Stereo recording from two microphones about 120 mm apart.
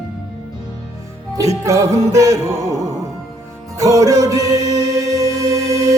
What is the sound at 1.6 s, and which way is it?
Music, 25° right (ahead or behind).